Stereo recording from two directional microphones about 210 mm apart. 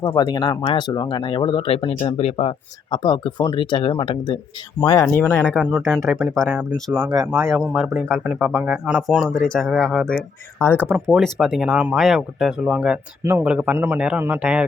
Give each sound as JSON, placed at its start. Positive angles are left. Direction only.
{"t": 0.0, "sound": "speech", "side_deg": 20}
{"t": 5.0, "sound": "speech", "side_deg": 5}
{"t": 6.9, "sound": "speech", "side_deg": -15}
{"t": 10.8, "sound": "speech", "side_deg": -5}